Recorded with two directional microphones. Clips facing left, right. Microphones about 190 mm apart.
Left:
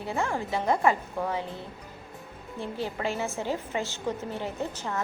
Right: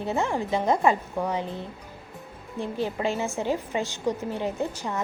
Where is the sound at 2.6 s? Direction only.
15° right (ahead or behind).